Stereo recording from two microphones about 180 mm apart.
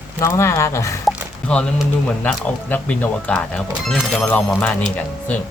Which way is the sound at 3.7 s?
5° right (ahead or behind).